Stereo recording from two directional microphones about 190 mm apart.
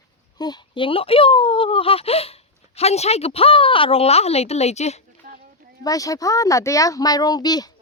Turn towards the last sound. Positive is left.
turn(degrees=20)  # may be behind; listen again after turning